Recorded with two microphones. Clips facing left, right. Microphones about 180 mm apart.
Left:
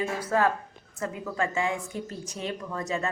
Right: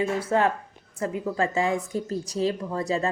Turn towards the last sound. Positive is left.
turn(degrees=-30)  # may be behind; listen again after turning